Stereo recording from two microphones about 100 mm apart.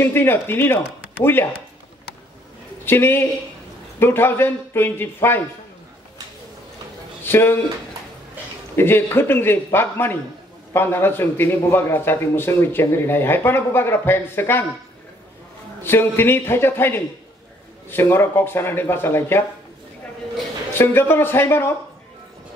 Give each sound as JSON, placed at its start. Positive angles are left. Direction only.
{"t": 0.0, "sound": "a man's voice", "side_deg": 20}
{"t": 2.8, "sound": "a man's voice", "side_deg": 20}
{"t": 7.2, "sound": "a man's voice", "side_deg": 25}
{"t": 8.7, "sound": "a man's voice", "side_deg": 20}
{"t": 15.8, "sound": "a man's voice", "side_deg": 20}
{"t": 20.7, "sound": "a man's voice", "side_deg": 20}